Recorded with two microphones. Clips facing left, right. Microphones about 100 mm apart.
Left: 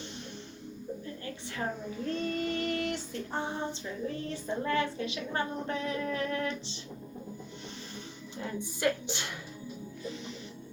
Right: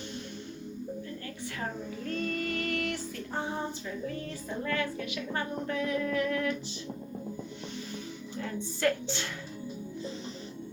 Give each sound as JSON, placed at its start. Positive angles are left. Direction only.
{"t": 2.0, "sound": "female singing", "side_deg": 25}
{"t": 4.6, "sound": "a woman's voice", "side_deg": 25}
{"t": 8.4, "sound": "a woman's voice", "side_deg": 15}